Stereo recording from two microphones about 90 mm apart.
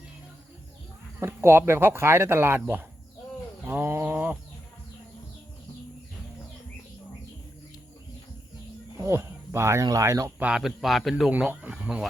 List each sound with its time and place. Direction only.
1.2 s speech: 25° right (ahead or behind)
3.6 s a sound: 20° right (ahead or behind)
9.0 s speech: 35° right (ahead or behind)
10.4 s speech: 5° right (ahead or behind)
11.3 s speech: 15° right (ahead or behind)